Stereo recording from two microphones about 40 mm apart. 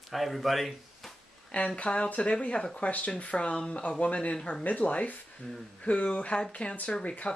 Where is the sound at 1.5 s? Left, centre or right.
Left.